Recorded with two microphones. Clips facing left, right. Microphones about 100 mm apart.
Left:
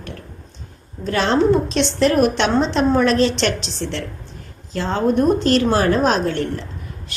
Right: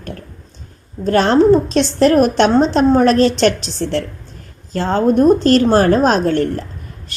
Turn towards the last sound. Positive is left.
turn(degrees=-45)  # may be behind; listen again after turning